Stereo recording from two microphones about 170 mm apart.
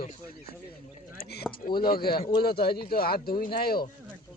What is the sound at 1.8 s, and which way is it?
Speech, 60° left (ahead or behind).